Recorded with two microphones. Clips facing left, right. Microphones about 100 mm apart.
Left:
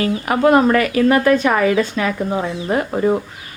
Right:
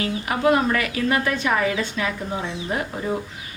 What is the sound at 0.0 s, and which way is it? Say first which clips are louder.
A woman's voice: left 6 dB; 50° left (ahead or behind).